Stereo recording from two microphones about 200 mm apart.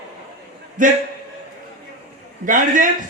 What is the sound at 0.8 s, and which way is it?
Speech, 40° right (ahead or behind).